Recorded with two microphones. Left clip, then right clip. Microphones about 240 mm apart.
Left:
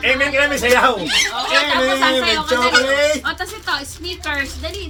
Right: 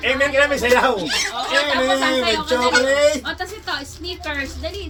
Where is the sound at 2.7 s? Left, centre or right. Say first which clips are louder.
Right 1 dB; centre.